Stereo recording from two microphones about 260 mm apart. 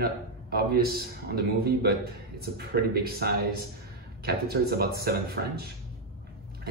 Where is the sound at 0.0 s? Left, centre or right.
Right.